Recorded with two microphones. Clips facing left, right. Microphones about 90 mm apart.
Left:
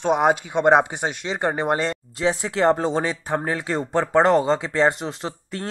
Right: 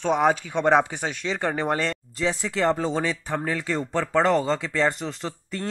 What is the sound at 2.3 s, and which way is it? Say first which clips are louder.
Speech: left 4 dB; 30° left (ahead or behind).